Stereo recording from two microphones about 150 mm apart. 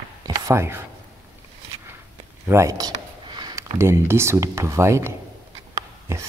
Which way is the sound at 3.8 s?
15° right (ahead or behind).